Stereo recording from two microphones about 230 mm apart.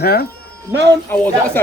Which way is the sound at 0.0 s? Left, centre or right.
Left.